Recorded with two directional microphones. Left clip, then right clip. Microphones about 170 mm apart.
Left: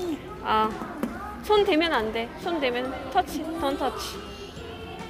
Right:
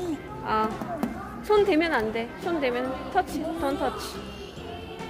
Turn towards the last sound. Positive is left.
turn(degrees=-10)  # may be behind; listen again after turning